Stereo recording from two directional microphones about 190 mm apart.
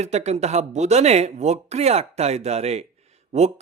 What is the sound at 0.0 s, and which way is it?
Speech, 35° right (ahead or behind).